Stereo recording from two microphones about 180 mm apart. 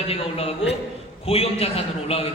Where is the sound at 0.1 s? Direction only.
30° left (ahead or behind).